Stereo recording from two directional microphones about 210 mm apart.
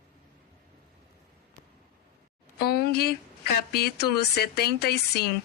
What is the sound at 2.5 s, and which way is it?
A woman's voice, 50° left (ahead or behind).